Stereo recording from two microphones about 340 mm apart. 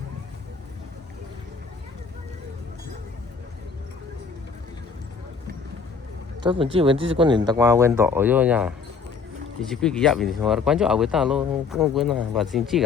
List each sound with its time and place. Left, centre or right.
6.4 s speech: centre